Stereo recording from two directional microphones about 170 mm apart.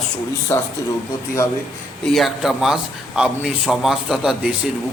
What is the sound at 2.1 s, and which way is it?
A man's voice, centre (ahead or behind).